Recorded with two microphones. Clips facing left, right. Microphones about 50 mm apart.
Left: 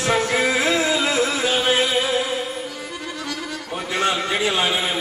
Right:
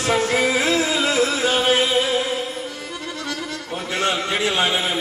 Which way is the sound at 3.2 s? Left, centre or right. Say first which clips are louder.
Right 1 dB; centre.